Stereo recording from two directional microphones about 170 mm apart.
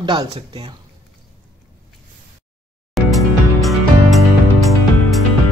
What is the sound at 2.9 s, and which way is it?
Music, centre (ahead or behind).